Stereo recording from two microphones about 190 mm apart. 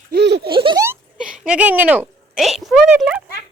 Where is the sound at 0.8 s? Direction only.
10° right (ahead or behind).